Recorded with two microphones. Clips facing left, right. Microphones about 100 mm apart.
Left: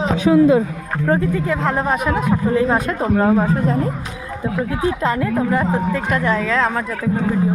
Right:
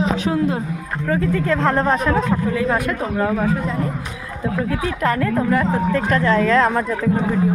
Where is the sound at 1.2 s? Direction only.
15° left (ahead or behind).